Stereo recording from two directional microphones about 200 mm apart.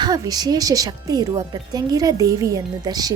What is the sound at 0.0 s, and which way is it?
A woman's voice, 20° right (ahead or behind).